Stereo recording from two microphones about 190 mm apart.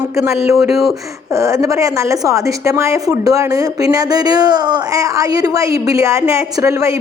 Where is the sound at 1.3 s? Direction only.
15° right (ahead or behind).